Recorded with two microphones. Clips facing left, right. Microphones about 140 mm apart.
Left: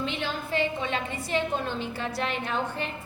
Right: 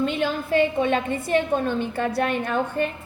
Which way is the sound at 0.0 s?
50° right (ahead or behind).